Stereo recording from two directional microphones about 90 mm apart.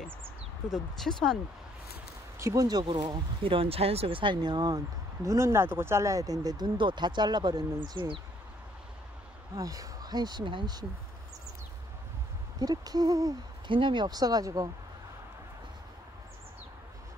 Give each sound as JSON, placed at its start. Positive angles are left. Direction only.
{"t": 0.9, "sound": "speech", "side_deg": 5}
{"t": 2.3, "sound": "speech", "side_deg": -35}
{"t": 3.4, "sound": "speech", "side_deg": -90}
{"t": 9.6, "sound": "speech", "side_deg": -40}
{"t": 12.5, "sound": "speech", "side_deg": -45}
{"t": 13.7, "sound": "speech", "side_deg": -70}